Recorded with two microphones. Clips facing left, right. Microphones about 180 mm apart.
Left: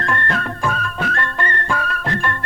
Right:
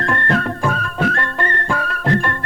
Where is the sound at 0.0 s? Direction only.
40° right (ahead or behind).